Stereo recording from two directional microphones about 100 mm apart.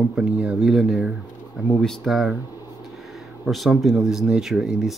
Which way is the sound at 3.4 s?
Centre (ahead or behind).